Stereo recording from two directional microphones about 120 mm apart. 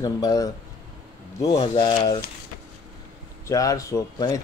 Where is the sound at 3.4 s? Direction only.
30° left (ahead or behind).